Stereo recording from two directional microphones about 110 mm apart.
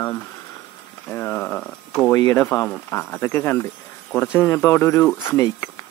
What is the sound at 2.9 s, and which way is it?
Speech, 20° left (ahead or behind).